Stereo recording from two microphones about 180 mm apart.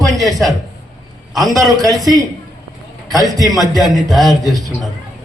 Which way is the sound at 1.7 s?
20° right (ahead or behind).